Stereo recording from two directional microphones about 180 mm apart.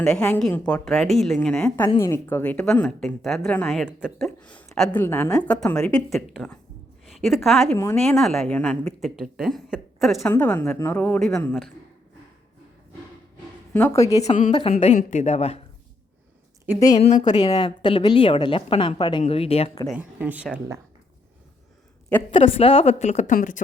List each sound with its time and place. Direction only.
0.0 s a woman's voice: 5° left (ahead or behind)
10.2 s a woman's voice: 10° left (ahead or behind)
13.7 s a woman's voice: 15° left (ahead or behind)
14.5 s a woman's voice: 30° left (ahead or behind)
17.0 s a woman's voice: 40° left (ahead or behind)
17.6 s a woman's voice: 25° left (ahead or behind)
19.9 s speech: 10° right (ahead or behind)
22.3 s a woman's voice: 30° left (ahead or behind); by 23.6 s 45° left (ahead or behind)